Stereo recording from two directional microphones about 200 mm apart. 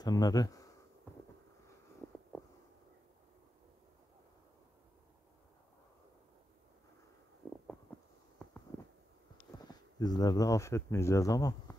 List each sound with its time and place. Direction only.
0.0 s speech: 20° left (ahead or behind)
8.7 s a sound: 10° left (ahead or behind)
9.7 s speech: 20° left (ahead or behind)